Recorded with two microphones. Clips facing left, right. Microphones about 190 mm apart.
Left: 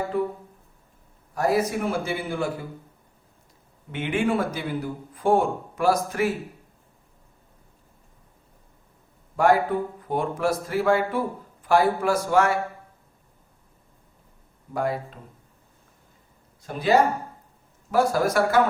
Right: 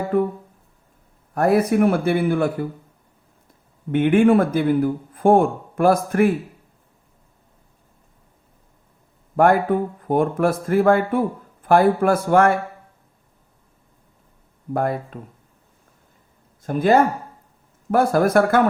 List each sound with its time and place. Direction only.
0.1 s a man's voice: 55° right (ahead or behind)
1.4 s speech: 60° right (ahead or behind)
3.9 s a man's voice: 55° right (ahead or behind)
9.3 s a man's voice: 55° right (ahead or behind)
14.7 s a man's voice: 55° right (ahead or behind)
16.6 s a man's voice: 50° right (ahead or behind)